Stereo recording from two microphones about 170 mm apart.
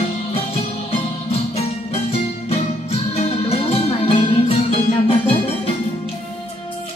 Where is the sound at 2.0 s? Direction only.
35° left (ahead or behind).